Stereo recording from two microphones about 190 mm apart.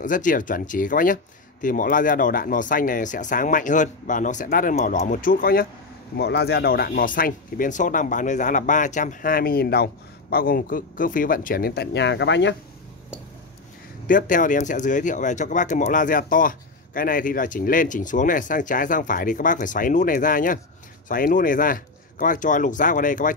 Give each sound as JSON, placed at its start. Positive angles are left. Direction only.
{"t": 0.0, "sound": "speech", "side_deg": 45}
{"t": 14.0, "sound": "speech", "side_deg": 45}